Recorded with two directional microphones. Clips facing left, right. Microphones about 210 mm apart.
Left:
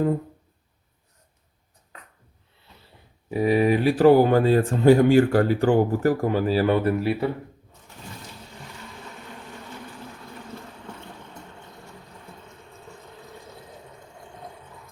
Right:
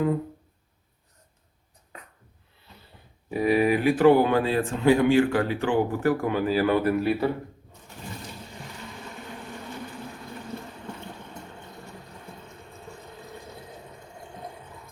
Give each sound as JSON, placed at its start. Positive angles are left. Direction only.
{"t": 3.2, "sound": "speech", "side_deg": 30}